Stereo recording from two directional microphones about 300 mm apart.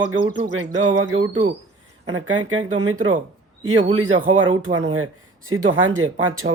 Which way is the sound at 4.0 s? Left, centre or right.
Right.